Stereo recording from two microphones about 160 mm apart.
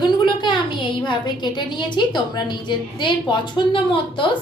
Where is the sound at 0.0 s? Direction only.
30° left (ahead or behind).